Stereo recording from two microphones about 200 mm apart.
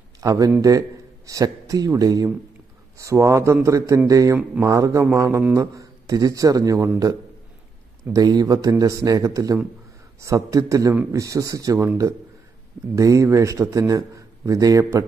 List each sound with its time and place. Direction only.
0.2 s a man's voice: 15° right (ahead or behind)